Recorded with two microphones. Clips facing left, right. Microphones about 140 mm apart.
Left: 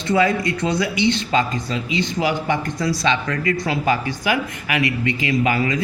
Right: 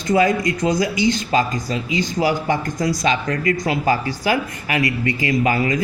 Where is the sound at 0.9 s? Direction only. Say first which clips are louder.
Right 1 dB; 25° left (ahead or behind).